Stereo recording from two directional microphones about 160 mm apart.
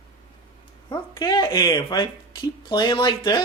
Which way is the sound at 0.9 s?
30° left (ahead or behind).